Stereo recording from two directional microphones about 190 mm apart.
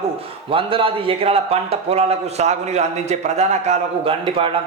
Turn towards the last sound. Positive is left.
turn(degrees=-30)  # may be behind; listen again after turning